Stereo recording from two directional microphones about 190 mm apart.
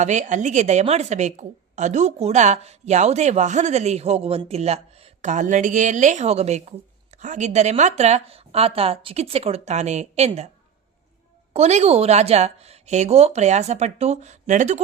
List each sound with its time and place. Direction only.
0.0 s a woman's voice: 40° right (ahead or behind)
11.5 s a woman's voice: 35° right (ahead or behind)